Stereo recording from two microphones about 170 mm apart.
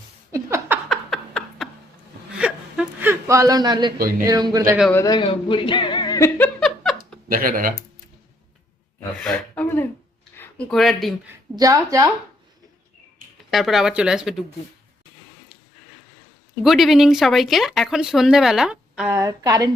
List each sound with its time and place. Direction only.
0.3 s a sound: 15° right (ahead or behind)
0.9 s a sound: centre (ahead or behind)
2.4 s whimper: 10° right (ahead or behind); by 3.9 s 25° right (ahead or behind)
4.2 s a woman's voice: 20° right (ahead or behind)
5.0 s speech: 30° left (ahead or behind)
6.6 s a sound: centre (ahead or behind)
7.3 s speech: 55° right (ahead or behind)
9.2 s speech: 10° left (ahead or behind)
10.3 s a sound: 10° left (ahead or behind)
10.8 s speech: centre (ahead or behind)
11.5 s a woman's voice: 20° right (ahead or behind)
13.5 s speech: centre (ahead or behind)
16.6 s speech: centre (ahead or behind)
19.1 s a woman's voice: 20° right (ahead or behind)